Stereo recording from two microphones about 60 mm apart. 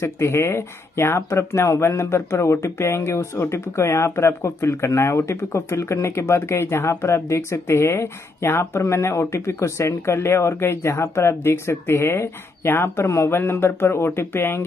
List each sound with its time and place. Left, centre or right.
0.0 s speech: left